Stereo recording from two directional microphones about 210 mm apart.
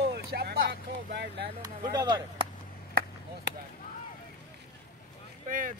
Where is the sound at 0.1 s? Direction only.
50° right (ahead or behind).